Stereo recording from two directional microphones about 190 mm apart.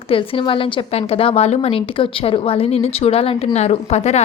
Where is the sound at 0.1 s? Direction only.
25° left (ahead or behind).